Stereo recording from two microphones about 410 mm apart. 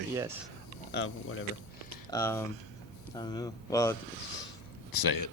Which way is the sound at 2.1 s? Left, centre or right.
Centre.